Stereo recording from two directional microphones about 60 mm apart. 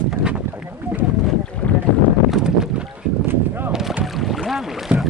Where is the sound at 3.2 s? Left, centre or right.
Right.